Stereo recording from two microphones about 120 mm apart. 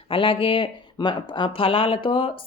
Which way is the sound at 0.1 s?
45° left (ahead or behind).